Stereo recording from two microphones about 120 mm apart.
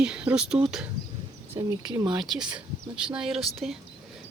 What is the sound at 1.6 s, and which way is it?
Speech, 40° right (ahead or behind).